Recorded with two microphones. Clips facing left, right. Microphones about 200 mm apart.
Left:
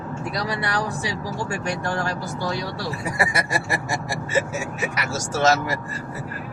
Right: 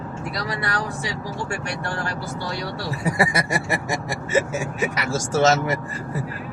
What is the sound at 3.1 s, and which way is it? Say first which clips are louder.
Speech: right 2 dB; 25° right (ahead or behind).